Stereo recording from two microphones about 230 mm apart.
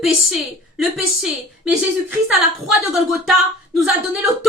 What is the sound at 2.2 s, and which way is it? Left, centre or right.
A woman's voice, centre.